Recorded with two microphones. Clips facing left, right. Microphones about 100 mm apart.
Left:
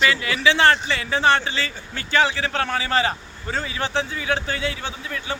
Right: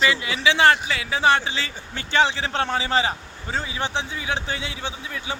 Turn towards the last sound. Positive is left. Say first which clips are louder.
# left 1 dB
turn(degrees=-15)  # may be behind; listen again after turning